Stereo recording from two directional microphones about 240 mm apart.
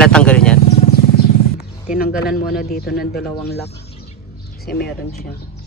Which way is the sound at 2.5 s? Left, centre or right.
Left.